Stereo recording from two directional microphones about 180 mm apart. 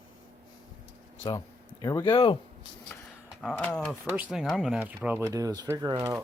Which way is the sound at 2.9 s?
10° left (ahead or behind).